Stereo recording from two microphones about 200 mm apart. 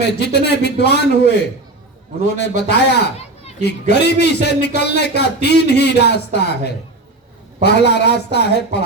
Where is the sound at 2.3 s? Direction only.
55° left (ahead or behind).